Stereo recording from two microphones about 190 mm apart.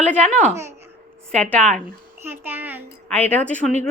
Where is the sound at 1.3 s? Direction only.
10° left (ahead or behind).